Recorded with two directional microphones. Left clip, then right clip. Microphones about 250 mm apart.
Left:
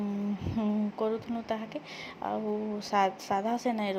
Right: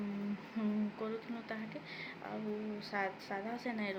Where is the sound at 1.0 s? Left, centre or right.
Left.